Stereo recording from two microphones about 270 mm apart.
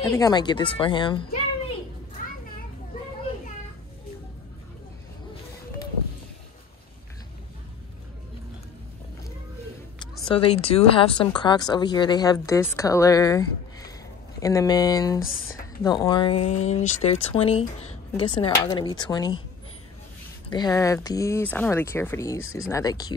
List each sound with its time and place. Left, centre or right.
0.0 s speech: centre
9.9 s speech: centre
20.5 s speech: centre